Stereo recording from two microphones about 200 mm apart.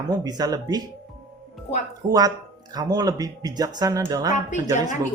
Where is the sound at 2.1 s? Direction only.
20° right (ahead or behind).